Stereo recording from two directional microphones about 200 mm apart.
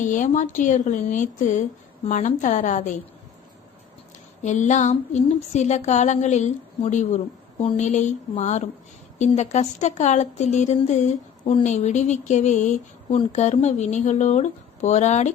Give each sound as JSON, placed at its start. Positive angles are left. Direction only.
{"t": 0.0, "sound": "a woman's voice", "side_deg": 40}
{"t": 4.4, "sound": "a woman's voice", "side_deg": 35}